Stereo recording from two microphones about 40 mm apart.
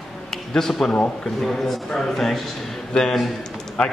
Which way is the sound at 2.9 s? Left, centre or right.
Centre.